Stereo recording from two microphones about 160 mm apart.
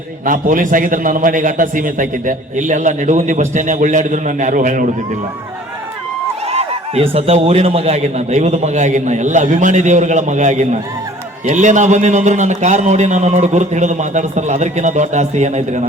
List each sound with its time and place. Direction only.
0.3 s a man's voice: 55° right (ahead or behind)
6.5 s a man's voice: 40° right (ahead or behind)